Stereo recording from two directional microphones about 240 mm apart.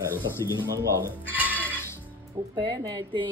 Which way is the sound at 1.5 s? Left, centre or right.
Centre.